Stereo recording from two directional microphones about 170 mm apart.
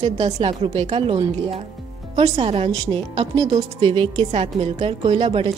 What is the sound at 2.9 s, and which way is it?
A woman's voice, 25° right (ahead or behind).